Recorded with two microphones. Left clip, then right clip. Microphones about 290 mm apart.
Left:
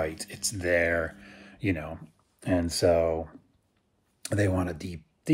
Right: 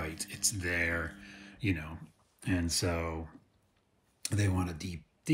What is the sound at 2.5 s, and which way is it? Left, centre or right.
Speech, centre.